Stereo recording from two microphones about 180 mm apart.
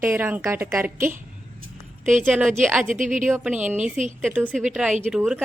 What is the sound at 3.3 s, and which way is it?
Speech, 5° right (ahead or behind).